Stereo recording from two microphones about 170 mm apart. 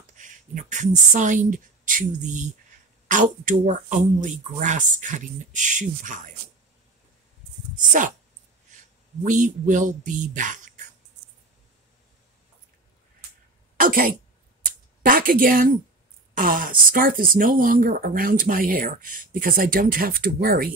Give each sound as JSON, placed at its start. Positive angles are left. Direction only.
{"t": 0.2, "sound": "speech", "side_deg": -45}
{"t": 7.7, "sound": "speech", "side_deg": -50}
{"t": 9.2, "sound": "speech", "side_deg": -50}
{"t": 13.7, "sound": "speech", "side_deg": -55}